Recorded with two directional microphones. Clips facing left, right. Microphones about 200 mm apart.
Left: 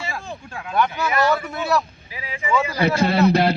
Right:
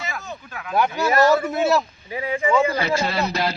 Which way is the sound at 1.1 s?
45° right (ahead or behind).